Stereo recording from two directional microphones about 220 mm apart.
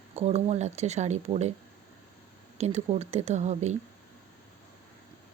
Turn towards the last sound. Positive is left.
turn(degrees=-30)  # may be behind; listen again after turning